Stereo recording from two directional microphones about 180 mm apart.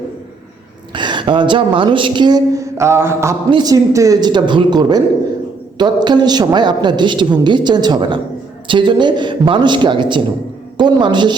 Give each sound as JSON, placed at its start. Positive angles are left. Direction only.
{"t": 0.9, "sound": "a woman's voice", "side_deg": -25}